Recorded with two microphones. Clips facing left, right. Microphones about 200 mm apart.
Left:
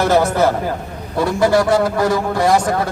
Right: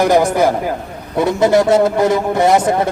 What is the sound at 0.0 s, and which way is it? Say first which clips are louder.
A man's voice: right 2 dB; 15° right (ahead or behind).